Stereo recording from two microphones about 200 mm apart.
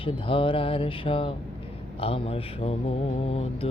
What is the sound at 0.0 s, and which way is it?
Speech, 25° left (ahead or behind).